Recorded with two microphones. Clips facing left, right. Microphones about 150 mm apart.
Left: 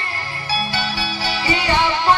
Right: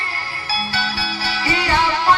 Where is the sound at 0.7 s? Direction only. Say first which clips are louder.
Left 1 dB; 20° left (ahead or behind).